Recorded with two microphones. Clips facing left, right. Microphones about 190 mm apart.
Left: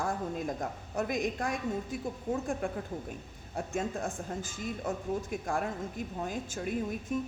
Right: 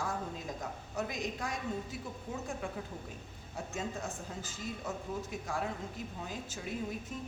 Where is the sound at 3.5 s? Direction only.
55° left (ahead or behind).